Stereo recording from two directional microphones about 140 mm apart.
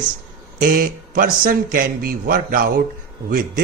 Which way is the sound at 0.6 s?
85° right.